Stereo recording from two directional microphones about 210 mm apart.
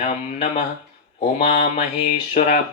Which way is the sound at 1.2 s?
35° left (ahead or behind).